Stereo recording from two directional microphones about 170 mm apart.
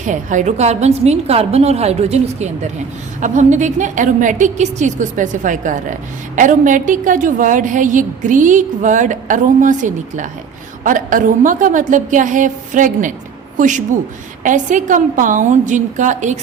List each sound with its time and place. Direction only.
0.0 s a woman's voice: 45° right (ahead or behind)